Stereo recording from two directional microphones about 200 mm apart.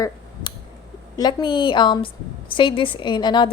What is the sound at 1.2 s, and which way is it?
A woman's voice, 20° left (ahead or behind).